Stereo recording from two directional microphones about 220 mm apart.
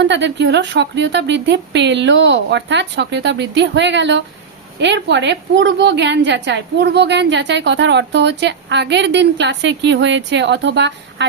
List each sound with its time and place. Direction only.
0.0 s a woman's voice: 55° right (ahead or behind)